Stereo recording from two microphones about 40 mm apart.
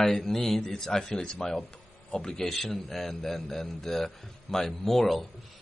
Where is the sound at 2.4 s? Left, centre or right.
Centre.